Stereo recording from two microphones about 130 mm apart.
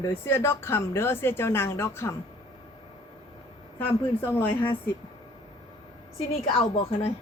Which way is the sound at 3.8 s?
15° left (ahead or behind).